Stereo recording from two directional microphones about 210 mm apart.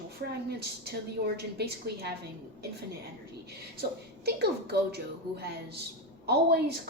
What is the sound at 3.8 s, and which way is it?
A woman's voice, 50° right (ahead or behind).